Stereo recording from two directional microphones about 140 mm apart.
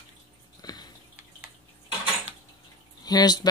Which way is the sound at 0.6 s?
30° left (ahead or behind).